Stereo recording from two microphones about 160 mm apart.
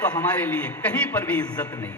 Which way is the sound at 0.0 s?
10° left (ahead or behind).